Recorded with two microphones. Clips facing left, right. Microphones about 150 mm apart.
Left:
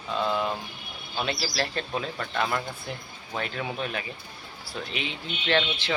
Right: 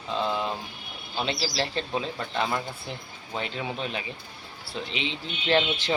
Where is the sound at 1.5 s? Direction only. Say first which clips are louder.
Right 1 dB; 25° right (ahead or behind).